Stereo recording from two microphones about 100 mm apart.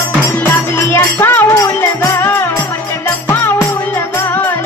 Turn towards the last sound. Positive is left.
turn(degrees=25)  # may be behind; listen again after turning